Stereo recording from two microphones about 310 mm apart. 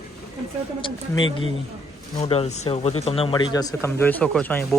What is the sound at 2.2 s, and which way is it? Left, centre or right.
Speech, centre.